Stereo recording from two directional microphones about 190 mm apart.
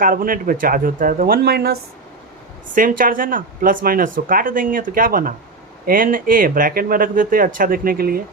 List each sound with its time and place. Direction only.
0.0 s speech: 45° right (ahead or behind)
2.7 s speech: 45° right (ahead or behind)